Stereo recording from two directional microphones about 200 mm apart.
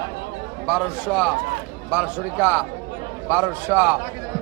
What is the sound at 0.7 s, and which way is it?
A man's voice, centre (ahead or behind).